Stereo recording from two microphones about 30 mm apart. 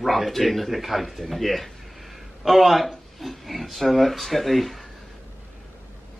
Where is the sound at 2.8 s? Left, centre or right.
Centre.